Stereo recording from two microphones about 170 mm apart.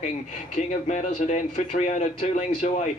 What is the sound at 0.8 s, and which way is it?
Speech, 45° left (ahead or behind).